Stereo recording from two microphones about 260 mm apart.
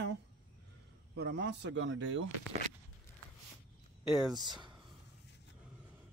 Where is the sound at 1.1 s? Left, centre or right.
Right.